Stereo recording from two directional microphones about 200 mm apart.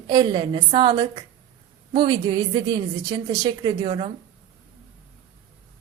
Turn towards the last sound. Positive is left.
turn(degrees=-25)  # may be behind; listen again after turning